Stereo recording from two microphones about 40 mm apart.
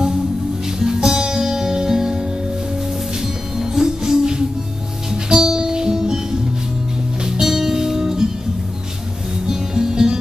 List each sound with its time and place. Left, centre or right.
0.7 s music: centre
3.5 s music: centre
7.2 s music: centre
9.5 s music: centre